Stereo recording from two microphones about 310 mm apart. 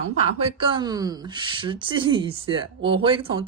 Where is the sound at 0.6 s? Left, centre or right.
Centre.